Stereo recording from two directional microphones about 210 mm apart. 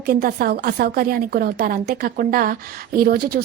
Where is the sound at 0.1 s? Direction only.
45° right (ahead or behind).